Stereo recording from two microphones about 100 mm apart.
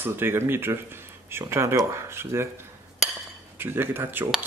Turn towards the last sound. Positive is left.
turn(degrees=-20)  # may be behind; listen again after turning